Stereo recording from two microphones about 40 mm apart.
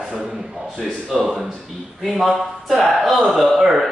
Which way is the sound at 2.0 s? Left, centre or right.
Centre.